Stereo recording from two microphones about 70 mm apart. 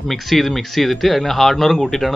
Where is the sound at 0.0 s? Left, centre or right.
Centre.